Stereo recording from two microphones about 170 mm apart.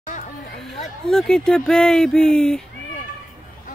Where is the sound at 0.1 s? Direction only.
50° left (ahead or behind).